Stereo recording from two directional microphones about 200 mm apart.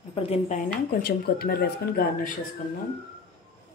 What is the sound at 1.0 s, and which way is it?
Speech, 50° left (ahead or behind).